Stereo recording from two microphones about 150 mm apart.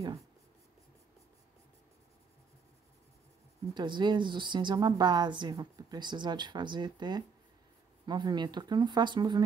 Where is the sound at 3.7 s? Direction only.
30° right (ahead or behind).